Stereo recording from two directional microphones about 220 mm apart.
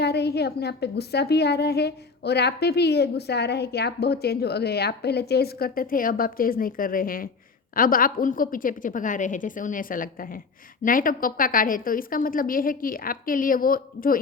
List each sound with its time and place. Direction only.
0.0 s a woman's voice: 50° left (ahead or behind)